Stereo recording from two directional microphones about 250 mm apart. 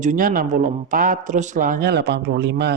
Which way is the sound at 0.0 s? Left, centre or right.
Right.